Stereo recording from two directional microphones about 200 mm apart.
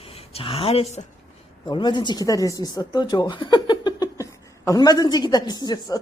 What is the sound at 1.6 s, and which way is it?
Speech, 25° left (ahead or behind).